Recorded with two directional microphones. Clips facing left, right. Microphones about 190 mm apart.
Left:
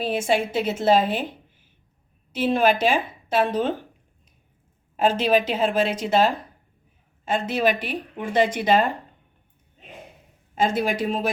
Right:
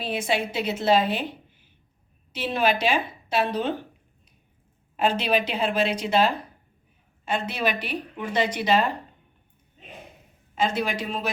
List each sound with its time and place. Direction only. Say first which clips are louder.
0.0 s a woman's voice: left 4 dB; 45° left (ahead or behind)
2.3 s a woman's voice: left 4 dB; 45° left (ahead or behind)
4.9 s a woman's voice: left 3 dB; 45° left (ahead or behind)
10.5 s a woman's voice: left 3 dB; 50° left (ahead or behind)